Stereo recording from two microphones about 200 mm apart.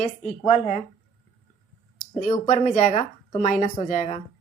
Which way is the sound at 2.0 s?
40° left (ahead or behind).